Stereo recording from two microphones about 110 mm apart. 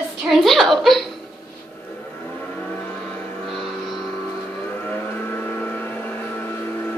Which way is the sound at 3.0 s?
5° left (ahead or behind).